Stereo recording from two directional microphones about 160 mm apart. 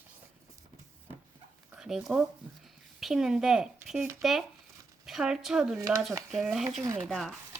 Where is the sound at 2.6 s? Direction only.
Centre (ahead or behind).